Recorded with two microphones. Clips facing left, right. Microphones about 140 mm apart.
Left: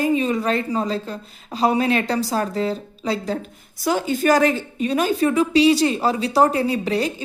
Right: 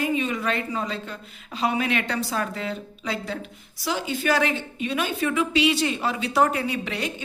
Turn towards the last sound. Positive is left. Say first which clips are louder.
# left 7 dB
turn(degrees=35)  # may be behind; listen again after turning